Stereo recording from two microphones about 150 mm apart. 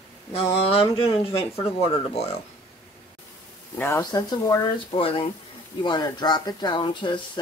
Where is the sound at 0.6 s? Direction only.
40° left (ahead or behind).